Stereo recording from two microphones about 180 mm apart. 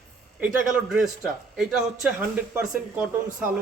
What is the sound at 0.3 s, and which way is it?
Speech, 5° right (ahead or behind).